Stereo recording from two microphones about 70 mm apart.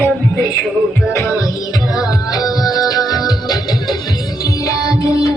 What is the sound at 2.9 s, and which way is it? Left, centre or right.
Music, left.